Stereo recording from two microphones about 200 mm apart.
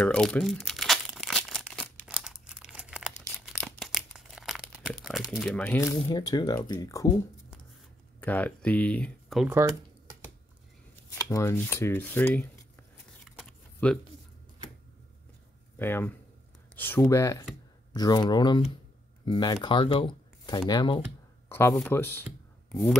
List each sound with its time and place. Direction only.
0.0 s tearing: 5° left (ahead or behind)
2.0 s a sound: 5° right (ahead or behind)
5.3 s speech: 5° left (ahead or behind)
8.2 s speech: 5° left (ahead or behind)
11.1 s speech: 15° left (ahead or behind)
13.2 s a sound: 5° left (ahead or behind)
15.8 s speech: 10° left (ahead or behind)
21.5 s speech: 10° left (ahead or behind)